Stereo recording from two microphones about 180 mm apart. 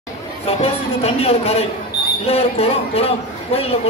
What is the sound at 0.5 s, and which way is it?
A man's voice, 35° left (ahead or behind).